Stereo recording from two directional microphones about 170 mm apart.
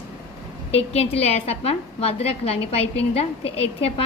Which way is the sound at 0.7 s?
35° left (ahead or behind).